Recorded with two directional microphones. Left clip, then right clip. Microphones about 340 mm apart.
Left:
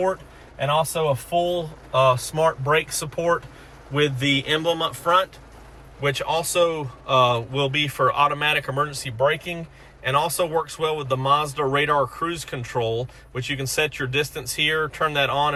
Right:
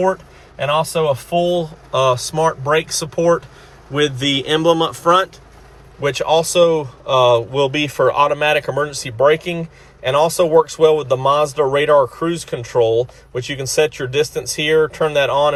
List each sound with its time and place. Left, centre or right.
1.1 s speech: centre